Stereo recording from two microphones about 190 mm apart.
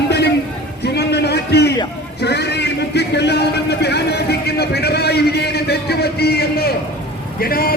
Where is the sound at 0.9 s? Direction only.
60° left (ahead or behind).